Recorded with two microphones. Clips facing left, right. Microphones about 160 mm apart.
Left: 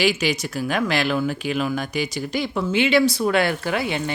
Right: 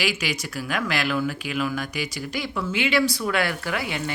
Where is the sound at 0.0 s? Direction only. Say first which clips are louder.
Left 6 dB; 25° left (ahead or behind).